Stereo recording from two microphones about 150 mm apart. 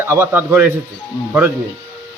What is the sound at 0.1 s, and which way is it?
Speech, 15° right (ahead or behind).